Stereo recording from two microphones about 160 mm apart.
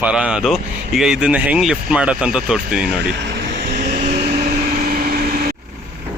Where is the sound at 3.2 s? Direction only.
80° right; by 4.2 s 45° right (ahead or behind).